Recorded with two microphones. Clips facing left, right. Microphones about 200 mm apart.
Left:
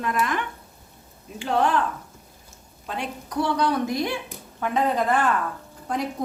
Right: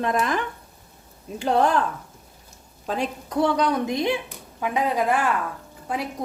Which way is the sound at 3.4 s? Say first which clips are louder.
Right 2 dB; 20° right (ahead or behind).